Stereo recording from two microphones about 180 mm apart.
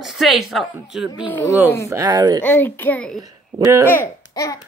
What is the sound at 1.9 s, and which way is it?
Speech, 20° right (ahead or behind).